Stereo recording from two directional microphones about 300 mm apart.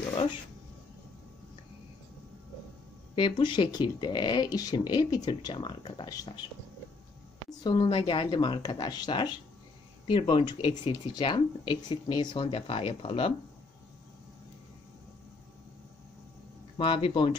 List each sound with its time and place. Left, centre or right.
3.2 s speech: centre
7.4 s speech: centre
16.7 s speech: centre